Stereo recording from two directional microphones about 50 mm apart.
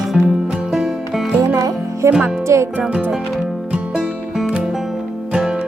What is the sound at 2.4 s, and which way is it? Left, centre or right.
Music, right.